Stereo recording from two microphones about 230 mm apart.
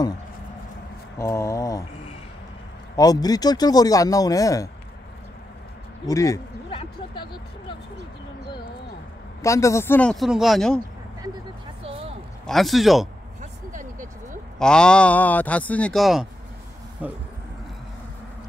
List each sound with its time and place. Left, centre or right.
1.1 s mantra: centre
3.0 s speech: centre
6.0 s a sound: centre
9.4 s speech: centre
11.8 s a sound: right
12.4 s speech: centre
13.4 s vehicle: right
14.6 s speech: centre